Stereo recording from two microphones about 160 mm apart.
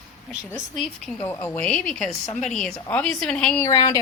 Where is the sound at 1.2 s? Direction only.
15° left (ahead or behind).